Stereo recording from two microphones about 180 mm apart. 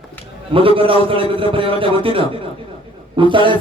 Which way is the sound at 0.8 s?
30° right (ahead or behind).